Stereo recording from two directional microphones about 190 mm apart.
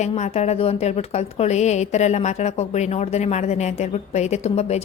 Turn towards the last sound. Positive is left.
turn(degrees=35)  # may be behind; listen again after turning